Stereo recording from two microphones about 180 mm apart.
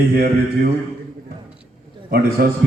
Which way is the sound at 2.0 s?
55° right (ahead or behind).